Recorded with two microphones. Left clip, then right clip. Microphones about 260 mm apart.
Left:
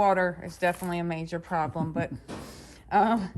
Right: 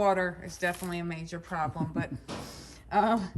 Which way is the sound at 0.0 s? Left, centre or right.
Centre.